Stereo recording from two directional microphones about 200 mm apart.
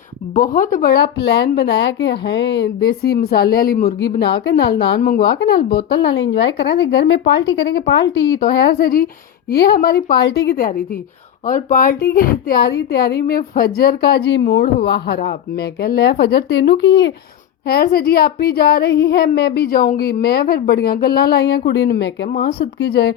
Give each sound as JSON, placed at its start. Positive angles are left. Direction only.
{"t": 0.3, "sound": "speech", "side_deg": 45}